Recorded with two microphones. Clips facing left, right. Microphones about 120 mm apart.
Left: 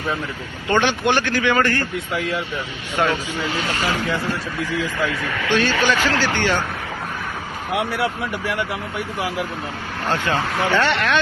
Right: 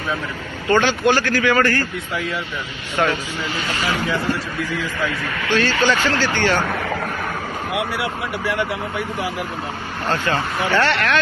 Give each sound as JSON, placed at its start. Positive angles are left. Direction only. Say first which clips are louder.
{"t": 0.7, "sound": "speech", "louder": "right 2 dB", "side_deg": 20}
{"t": 5.5, "sound": "speech", "louder": "right 1 dB", "side_deg": 15}
{"t": 10.1, "sound": "speech", "louder": "even", "side_deg": 15}